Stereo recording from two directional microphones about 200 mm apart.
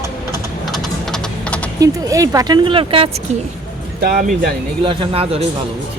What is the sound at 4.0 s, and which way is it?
Speech, 45° right (ahead or behind).